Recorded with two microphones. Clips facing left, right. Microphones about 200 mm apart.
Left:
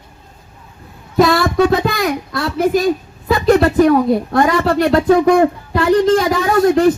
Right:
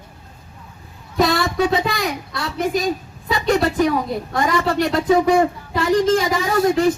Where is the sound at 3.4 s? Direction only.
55° left (ahead or behind).